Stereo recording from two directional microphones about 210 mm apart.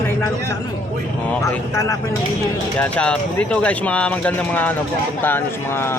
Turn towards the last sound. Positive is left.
turn(degrees=10)  # may be behind; listen again after turning